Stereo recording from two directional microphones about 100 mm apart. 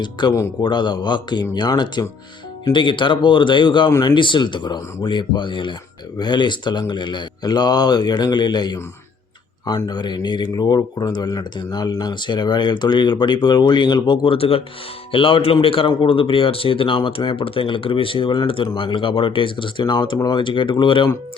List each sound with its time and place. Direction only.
0.0 s speech: 50° left (ahead or behind)
2.7 s speech: 55° left (ahead or behind)
14.3 s speech: 70° left (ahead or behind); by 21.1 s 55° left (ahead or behind)